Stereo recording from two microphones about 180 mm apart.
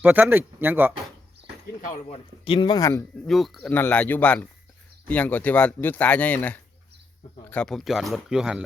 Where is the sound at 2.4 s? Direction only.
25° left (ahead or behind).